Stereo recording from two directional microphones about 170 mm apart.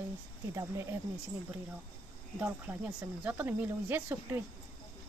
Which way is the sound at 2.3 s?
10° right (ahead or behind).